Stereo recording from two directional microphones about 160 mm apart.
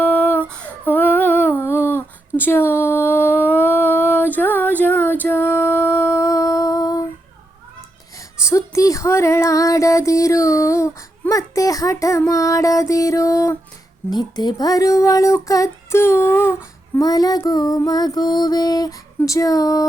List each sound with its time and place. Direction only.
0.0 s humming: 10° left (ahead or behind)
4.4 s female singing: 10° left (ahead or behind)
8.4 s a sound: 20° left (ahead or behind)
14.1 s speech: 25° left (ahead or behind)